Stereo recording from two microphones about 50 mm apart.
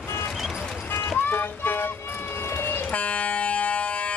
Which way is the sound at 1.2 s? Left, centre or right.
Left.